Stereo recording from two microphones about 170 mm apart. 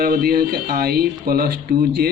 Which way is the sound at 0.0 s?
60° right (ahead or behind).